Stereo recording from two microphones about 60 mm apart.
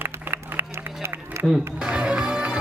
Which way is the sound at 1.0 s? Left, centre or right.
Right.